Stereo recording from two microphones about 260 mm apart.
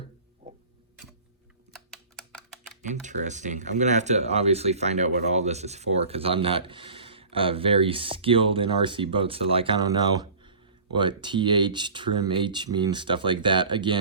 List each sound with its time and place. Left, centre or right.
1.7 s typing: centre
2.9 s speech: right
10.9 s speech: centre